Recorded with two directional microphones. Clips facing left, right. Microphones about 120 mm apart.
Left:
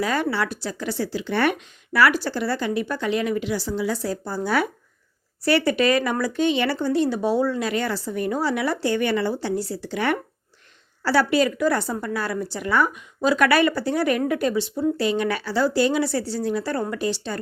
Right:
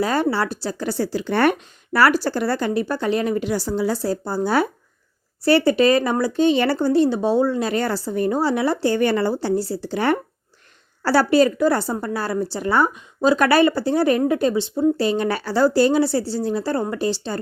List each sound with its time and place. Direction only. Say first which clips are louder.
0.0 s a woman's voice: right 3 dB; 35° right (ahead or behind)
7.7 s a woman's voice: right 3 dB; 40° right (ahead or behind)